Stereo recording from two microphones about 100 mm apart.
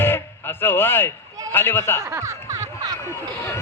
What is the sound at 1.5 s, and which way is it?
Speech, 20° left (ahead or behind).